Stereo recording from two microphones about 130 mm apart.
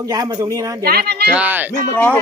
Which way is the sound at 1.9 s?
10° left (ahead or behind).